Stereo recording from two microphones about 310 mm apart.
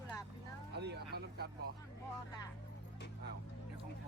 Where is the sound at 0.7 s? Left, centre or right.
Right.